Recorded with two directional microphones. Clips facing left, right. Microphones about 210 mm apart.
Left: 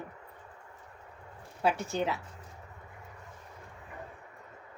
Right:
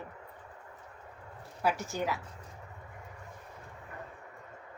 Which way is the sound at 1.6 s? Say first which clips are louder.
Left 2 dB; 25° left (ahead or behind).